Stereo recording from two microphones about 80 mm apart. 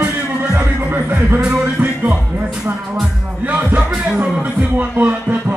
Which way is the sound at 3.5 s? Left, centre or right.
Centre.